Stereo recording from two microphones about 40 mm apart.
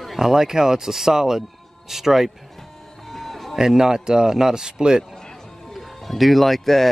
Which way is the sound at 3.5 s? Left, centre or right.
Centre.